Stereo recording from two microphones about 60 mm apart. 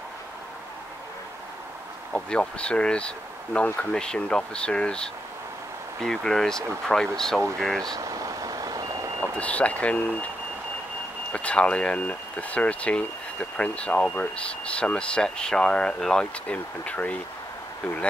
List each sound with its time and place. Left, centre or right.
2.1 s speech: centre
7.9 s vehicle: right
9.2 s speech: left
11.3 s speech: left
16.4 s speech: left